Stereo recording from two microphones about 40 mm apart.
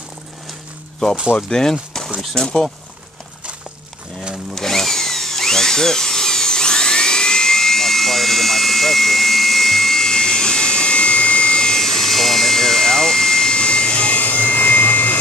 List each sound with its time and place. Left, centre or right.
1.5 s speech: centre
4.6 s drill: centre; by 11.6 s left
11.6 s jet engine: centre
14.1 s vacuum cleaner: left